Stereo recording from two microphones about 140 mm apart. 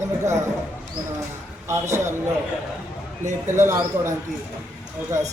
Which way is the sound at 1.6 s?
20° right (ahead or behind).